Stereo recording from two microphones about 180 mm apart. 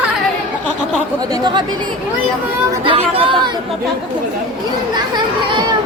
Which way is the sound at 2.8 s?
30° right (ahead or behind).